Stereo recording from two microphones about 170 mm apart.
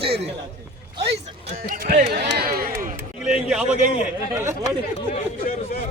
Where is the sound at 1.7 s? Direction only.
55° right (ahead or behind).